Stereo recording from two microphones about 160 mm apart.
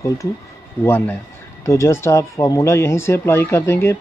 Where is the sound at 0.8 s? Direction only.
15° left (ahead or behind).